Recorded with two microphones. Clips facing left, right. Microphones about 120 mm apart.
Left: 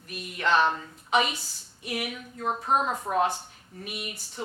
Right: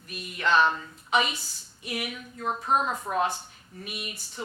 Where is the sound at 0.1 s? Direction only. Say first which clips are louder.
Even; 55° left (ahead or behind).